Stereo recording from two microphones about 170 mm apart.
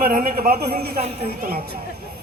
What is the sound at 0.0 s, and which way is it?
Speech, 60° right (ahead or behind).